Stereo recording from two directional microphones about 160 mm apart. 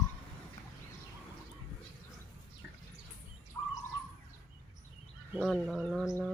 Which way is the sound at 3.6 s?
25° left (ahead or behind).